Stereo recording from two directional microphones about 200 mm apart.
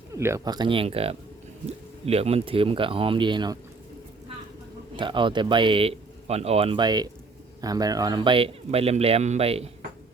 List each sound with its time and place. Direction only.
0.1 s speech: 15° right (ahead or behind)
4.9 s speech: 25° right (ahead or behind)